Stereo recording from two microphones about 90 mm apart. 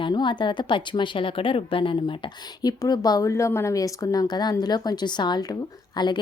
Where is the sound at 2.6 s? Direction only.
45° left (ahead or behind).